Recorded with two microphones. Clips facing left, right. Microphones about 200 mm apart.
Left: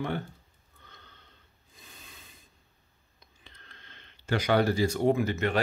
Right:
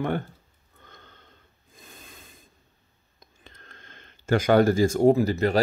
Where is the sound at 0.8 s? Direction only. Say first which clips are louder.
Right 4 dB; 50° right (ahead or behind).